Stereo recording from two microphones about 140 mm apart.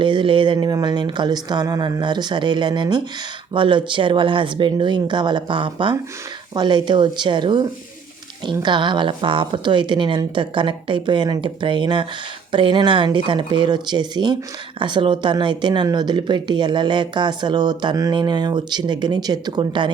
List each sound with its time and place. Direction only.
0.0 s speech: 35° right (ahead or behind)